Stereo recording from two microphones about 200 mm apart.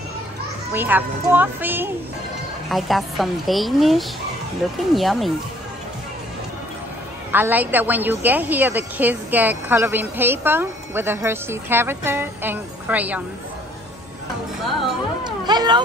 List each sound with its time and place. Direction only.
0.7 s a woman's voice: 10° right (ahead or behind)
7.3 s a woman's voice: 10° right (ahead or behind)
15.4 s speech: 20° right (ahead or behind)